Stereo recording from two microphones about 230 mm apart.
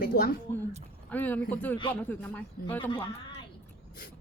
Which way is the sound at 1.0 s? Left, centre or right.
Centre.